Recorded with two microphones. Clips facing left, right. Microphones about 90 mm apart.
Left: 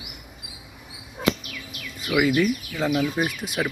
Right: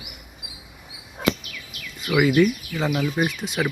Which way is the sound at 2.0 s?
Centre (ahead or behind).